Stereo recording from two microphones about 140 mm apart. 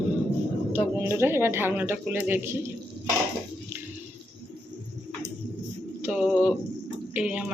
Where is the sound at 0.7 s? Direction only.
15° right (ahead or behind).